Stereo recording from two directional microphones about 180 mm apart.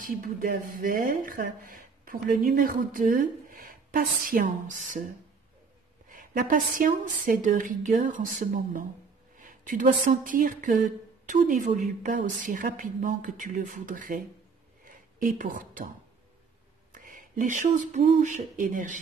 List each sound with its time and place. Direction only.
0.0 s speech: 50° right (ahead or behind)
6.0 s speech: 50° right (ahead or behind)
14.9 s a sound: 50° right (ahead or behind)
16.9 s speech: 50° right (ahead or behind)